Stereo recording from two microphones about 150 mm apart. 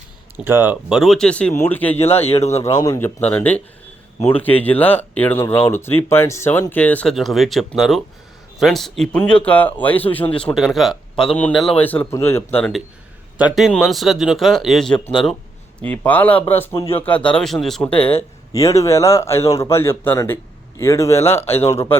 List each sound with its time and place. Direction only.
0.3 s speech: 15° right (ahead or behind); by 2.0 s 10° left (ahead or behind)
2.2 s speech: 45° left (ahead or behind)
2.6 s speech: 20° left (ahead or behind)
3.2 s speech: 10° left (ahead or behind)
13.4 s speech: centre (ahead or behind)
18.5 s speech: 20° left (ahead or behind)